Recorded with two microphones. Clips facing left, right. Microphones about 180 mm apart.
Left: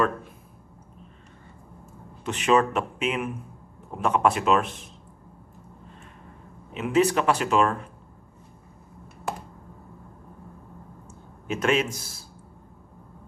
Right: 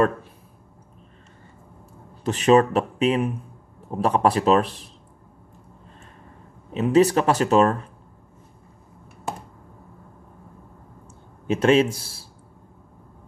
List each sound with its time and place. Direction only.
2.2 s speech: 35° right (ahead or behind)
6.7 s speech: 35° right (ahead or behind)
11.4 s speech: 30° right (ahead or behind)